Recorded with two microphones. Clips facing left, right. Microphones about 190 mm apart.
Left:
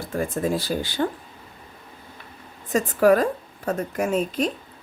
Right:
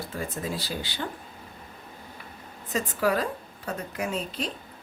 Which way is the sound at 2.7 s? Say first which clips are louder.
Left 8 dB; 50° left (ahead or behind).